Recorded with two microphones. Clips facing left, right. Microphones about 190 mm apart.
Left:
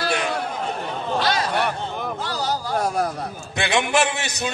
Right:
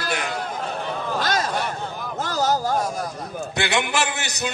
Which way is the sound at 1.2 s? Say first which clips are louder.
Left 3 dB; 45° right (ahead or behind).